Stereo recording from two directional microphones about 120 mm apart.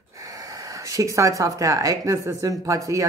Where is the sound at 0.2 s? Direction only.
30° right (ahead or behind).